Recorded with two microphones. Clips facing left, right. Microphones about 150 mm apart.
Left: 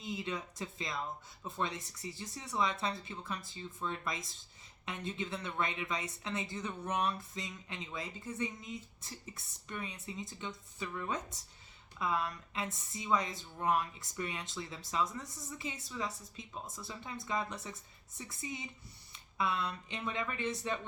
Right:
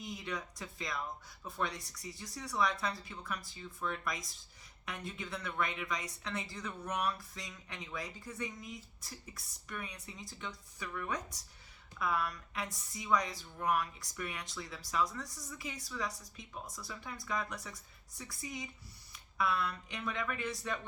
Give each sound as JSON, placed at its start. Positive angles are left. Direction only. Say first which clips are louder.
{"t": 0.0, "sound": "speech", "louder": "left 2 dB", "side_deg": 25}